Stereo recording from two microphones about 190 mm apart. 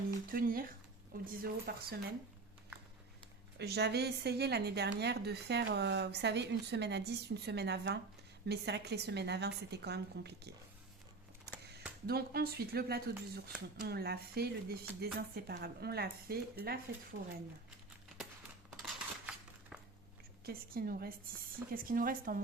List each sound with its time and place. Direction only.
0.3 s speech: 50° right (ahead or behind)
3.6 s a woman's voice: 60° right (ahead or behind)
11.7 s a woman's voice: 55° right (ahead or behind)
18.7 s scissors: centre (ahead or behind)
20.4 s speech: 50° right (ahead or behind)